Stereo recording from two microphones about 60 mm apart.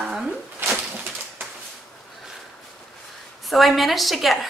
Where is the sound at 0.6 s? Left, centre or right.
Right.